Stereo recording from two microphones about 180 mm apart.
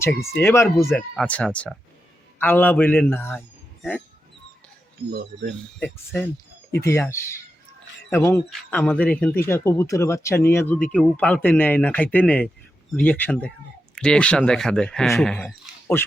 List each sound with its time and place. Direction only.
0.0 s speech: 15° left (ahead or behind)
0.9 s speech: 5° left (ahead or behind)
5.1 s speech: 65° right (ahead or behind)
6.8 s speech: 15° left (ahead or behind)